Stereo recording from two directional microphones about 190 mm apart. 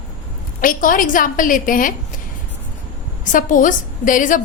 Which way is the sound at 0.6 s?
45° left (ahead or behind).